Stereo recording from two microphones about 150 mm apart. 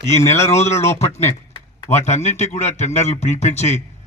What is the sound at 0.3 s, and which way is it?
A man's voice, 45° left (ahead or behind).